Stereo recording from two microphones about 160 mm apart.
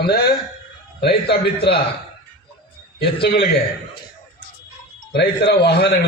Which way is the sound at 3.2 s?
90° left.